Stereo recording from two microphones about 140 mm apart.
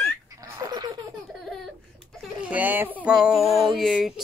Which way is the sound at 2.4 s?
10° right (ahead or behind).